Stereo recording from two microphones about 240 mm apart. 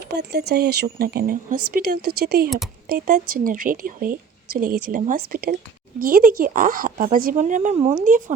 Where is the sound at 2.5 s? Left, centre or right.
Centre.